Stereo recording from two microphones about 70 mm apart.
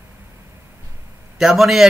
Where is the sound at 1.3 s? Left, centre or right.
Centre.